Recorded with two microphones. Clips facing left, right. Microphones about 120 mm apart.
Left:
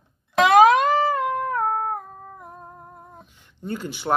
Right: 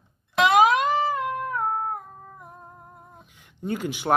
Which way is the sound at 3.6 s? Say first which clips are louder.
Right 2 dB; 10° right (ahead or behind).